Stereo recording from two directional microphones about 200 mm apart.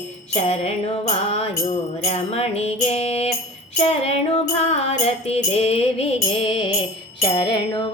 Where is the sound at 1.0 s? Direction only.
30° left (ahead or behind).